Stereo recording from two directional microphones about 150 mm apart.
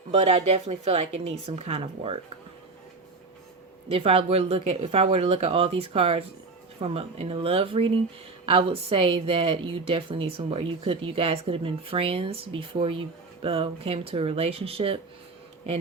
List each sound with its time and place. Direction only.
0.1 s a woman's voice: 40° right (ahead or behind)
3.8 s a woman's voice: 40° right (ahead or behind)